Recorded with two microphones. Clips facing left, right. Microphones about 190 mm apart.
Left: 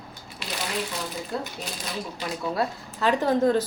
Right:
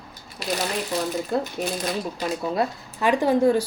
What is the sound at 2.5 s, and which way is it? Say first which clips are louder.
A woman's voice: right 3 dB; 15° right (ahead or behind).